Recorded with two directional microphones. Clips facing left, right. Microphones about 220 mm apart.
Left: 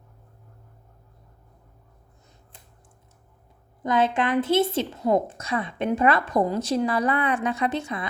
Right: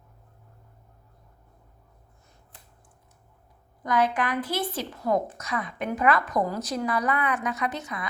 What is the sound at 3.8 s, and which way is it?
A woman's voice, 25° left (ahead or behind).